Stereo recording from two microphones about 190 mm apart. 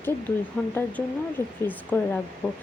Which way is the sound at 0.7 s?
10° left (ahead or behind).